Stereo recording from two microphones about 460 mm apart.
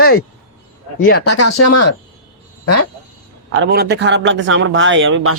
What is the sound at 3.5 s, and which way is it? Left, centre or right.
A man's voice, right.